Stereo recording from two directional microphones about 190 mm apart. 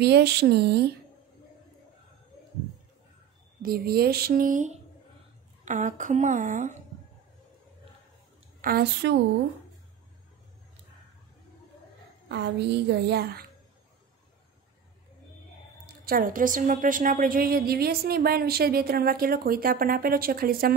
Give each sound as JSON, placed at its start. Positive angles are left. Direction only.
{"t": 0.0, "sound": "a woman's voice", "side_deg": -60}
{"t": 3.6, "sound": "a woman's voice", "side_deg": -55}
{"t": 8.5, "sound": "a woman's voice", "side_deg": -50}
{"t": 9.0, "sound": "speech", "side_deg": -70}
{"t": 12.3, "sound": "a woman's voice", "side_deg": -65}
{"t": 16.1, "sound": "a woman's voice", "side_deg": -45}